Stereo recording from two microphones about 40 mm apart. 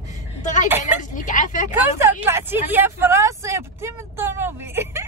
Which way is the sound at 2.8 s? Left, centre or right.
Right.